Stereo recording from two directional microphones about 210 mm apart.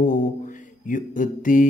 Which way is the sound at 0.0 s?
40° left (ahead or behind).